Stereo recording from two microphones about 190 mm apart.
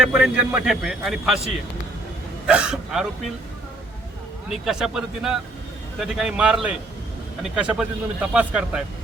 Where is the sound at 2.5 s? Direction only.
5° right (ahead or behind).